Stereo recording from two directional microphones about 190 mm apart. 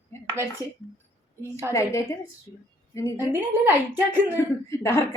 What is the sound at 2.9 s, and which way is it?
Speech, 15° left (ahead or behind).